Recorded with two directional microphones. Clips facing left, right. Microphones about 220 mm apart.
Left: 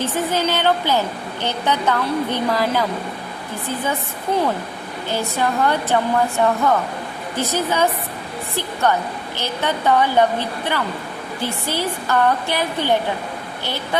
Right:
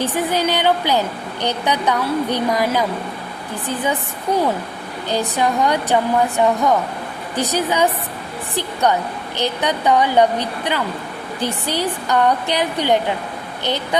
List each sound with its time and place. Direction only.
0.0 s a woman's voice: 15° right (ahead or behind)
5.0 s a woman's voice: 15° right (ahead or behind)